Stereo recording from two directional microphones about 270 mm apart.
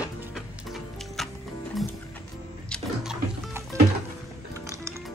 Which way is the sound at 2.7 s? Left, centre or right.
Centre.